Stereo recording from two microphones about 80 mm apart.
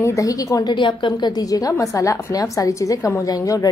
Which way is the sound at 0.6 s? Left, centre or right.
Left.